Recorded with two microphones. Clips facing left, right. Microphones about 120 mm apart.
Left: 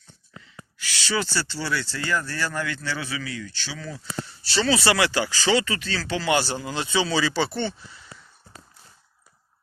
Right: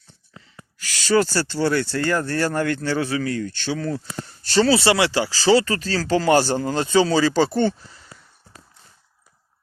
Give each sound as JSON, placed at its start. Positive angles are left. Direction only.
{"t": 0.8, "sound": "speech", "side_deg": -40}
{"t": 4.7, "sound": "speech", "side_deg": -25}